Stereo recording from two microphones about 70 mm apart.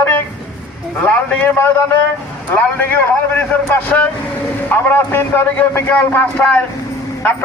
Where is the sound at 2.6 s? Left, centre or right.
Left.